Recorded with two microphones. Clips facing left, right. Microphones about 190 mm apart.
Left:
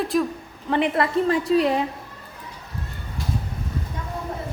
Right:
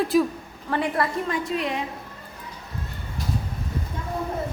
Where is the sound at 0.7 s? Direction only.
20° left (ahead or behind).